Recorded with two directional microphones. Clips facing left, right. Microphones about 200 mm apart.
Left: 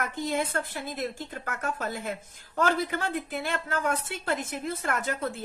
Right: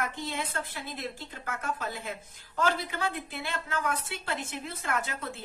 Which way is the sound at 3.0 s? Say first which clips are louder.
Left 3 dB; 45° left (ahead or behind).